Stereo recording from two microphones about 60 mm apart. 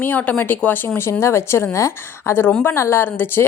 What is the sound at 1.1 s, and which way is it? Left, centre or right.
A woman's voice, left.